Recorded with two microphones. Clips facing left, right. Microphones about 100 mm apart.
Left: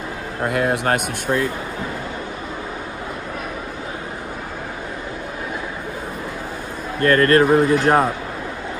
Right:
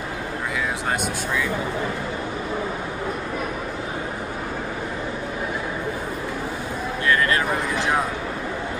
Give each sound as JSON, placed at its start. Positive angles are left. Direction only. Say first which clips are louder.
{"t": 0.5, "sound": "speech", "louder": "left 8 dB", "side_deg": 60}
{"t": 7.0, "sound": "speech", "louder": "left 8 dB", "side_deg": 50}